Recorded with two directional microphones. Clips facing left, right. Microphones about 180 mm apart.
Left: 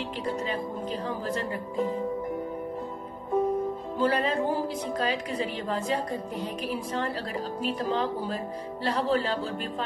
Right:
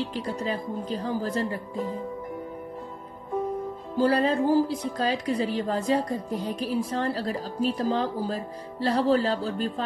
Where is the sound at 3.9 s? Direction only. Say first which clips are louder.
Right 4 dB; 35° right (ahead or behind).